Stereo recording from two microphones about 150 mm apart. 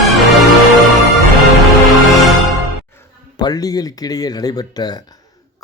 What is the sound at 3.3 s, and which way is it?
A man's voice, 25° left (ahead or behind).